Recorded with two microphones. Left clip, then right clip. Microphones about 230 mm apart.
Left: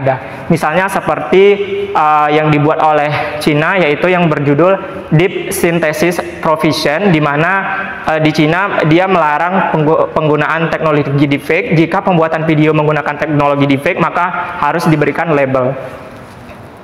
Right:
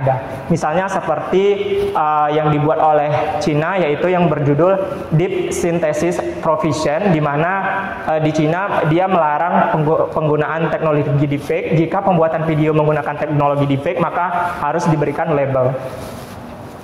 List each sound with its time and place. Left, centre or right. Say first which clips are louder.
0.5 s a man's voice: left 5 dB; left